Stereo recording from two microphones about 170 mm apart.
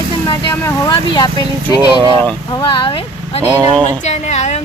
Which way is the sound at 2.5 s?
30° left (ahead or behind).